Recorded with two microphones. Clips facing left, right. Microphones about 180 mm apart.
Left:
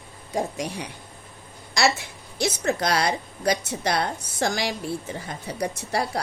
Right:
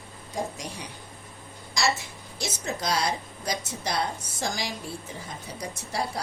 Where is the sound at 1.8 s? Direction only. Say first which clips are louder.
Left 5 dB; 65° left (ahead or behind).